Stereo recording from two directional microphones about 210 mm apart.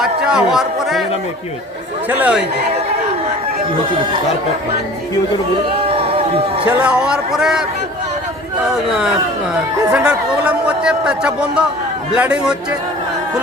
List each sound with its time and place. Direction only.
0.0 s speech: 5° right (ahead or behind)
2.0 s speech: 10° right (ahead or behind)
5.8 s a sound: 25° right (ahead or behind)
6.7 s speech: 5° right (ahead or behind)
9.9 s speech: 5° right (ahead or behind)